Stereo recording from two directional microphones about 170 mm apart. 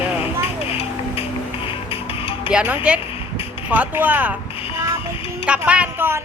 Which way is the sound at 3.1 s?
35° left (ahead or behind).